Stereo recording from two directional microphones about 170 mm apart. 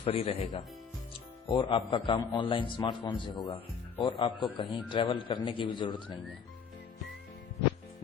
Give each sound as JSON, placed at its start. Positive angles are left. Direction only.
{"t": 0.0, "sound": "speech", "side_deg": 35}
{"t": 1.5, "sound": "speech", "side_deg": 30}